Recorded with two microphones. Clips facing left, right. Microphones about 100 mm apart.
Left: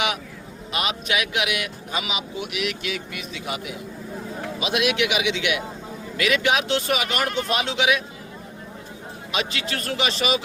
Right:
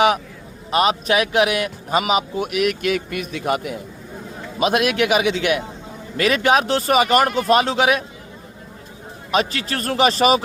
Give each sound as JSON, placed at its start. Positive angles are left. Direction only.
{"t": 0.7, "sound": "speech", "side_deg": -40}
{"t": 9.3, "sound": "speech", "side_deg": -40}